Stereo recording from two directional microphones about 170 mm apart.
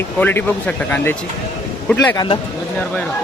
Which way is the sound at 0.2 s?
10° left (ahead or behind).